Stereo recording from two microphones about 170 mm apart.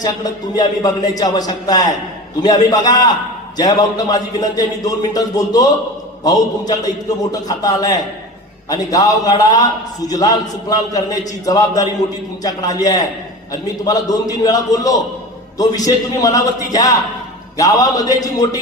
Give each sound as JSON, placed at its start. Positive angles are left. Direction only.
{"t": 0.5, "sound": "a man's voice", "side_deg": 20}